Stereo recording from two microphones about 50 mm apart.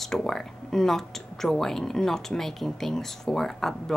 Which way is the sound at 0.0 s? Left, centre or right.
Centre.